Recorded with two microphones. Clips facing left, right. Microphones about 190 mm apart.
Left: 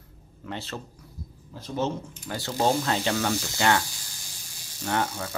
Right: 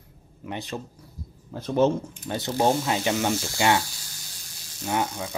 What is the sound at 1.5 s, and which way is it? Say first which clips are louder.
Speech: right 8 dB; 55° right (ahead or behind).